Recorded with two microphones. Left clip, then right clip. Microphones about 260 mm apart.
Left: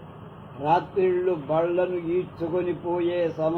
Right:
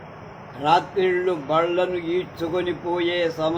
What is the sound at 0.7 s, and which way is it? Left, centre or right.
Speech, right.